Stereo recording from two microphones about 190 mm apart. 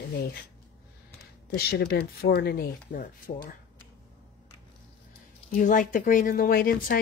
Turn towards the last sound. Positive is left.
turn(degrees=50)  # may be behind; listen again after turning